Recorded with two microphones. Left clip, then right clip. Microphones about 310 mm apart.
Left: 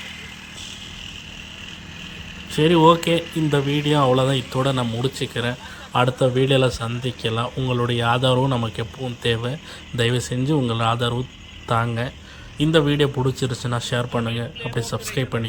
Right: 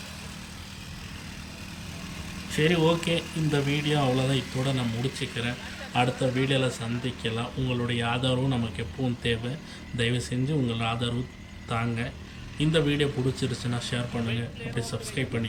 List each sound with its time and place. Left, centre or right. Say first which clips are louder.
2.6 s speech: left 9 dB; centre